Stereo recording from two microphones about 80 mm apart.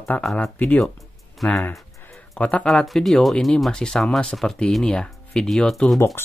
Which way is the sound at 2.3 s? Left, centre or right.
Centre.